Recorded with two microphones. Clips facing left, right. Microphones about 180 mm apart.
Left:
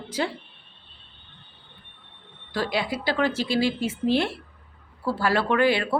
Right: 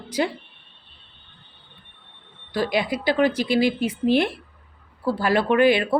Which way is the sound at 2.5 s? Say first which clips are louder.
Right 4 dB; 15° right (ahead or behind).